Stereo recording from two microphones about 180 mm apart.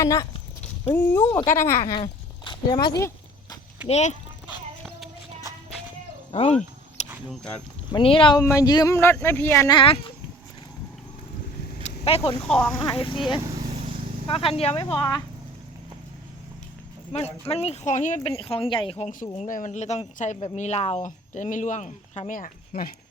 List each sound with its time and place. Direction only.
0.0 s speech: 15° left (ahead or behind)
1.8 s a sound: 30° left (ahead or behind)
3.8 s speech: 40° left (ahead or behind)
6.3 s speech: 35° left (ahead or behind)
7.9 s speech: 30° left (ahead or behind)
8.4 s speech: 15° left (ahead or behind)
11.8 s a sound: 35° left (ahead or behind)
12.4 s speech: 5° left (ahead or behind)
14.3 s speech: 30° left (ahead or behind)
17.1 s speech: 35° left (ahead or behind); by 23.0 s 55° left (ahead or behind)